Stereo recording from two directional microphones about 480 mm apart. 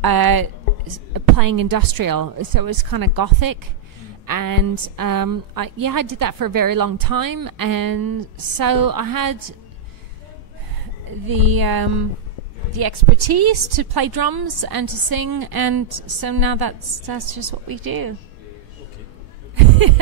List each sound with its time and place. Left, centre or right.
0.0 s a woman's voice: right
11.2 s a woman's voice: right
19.5 s a sound: right